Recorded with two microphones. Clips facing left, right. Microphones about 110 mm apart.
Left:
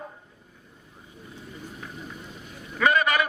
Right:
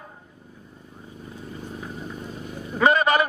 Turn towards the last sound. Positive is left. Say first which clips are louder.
# right 3 dB
turn(degrees=-30)  # may be behind; listen again after turning